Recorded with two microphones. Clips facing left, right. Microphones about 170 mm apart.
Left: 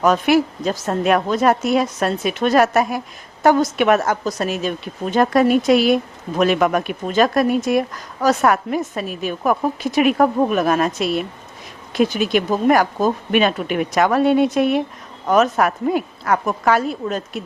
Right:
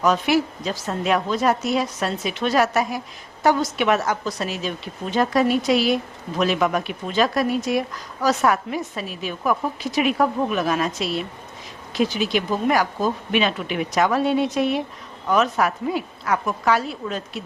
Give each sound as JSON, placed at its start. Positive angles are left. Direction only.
{"t": 0.0, "sound": "speech", "side_deg": 50}